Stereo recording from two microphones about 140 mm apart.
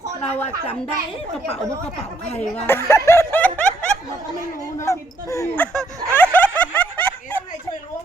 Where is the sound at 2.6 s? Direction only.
20° left (ahead or behind).